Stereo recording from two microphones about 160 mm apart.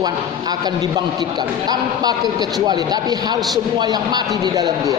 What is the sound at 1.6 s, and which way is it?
A man's voice, 25° right (ahead or behind).